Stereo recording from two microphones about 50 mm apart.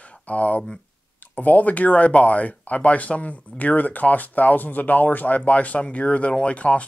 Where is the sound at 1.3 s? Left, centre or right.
Left.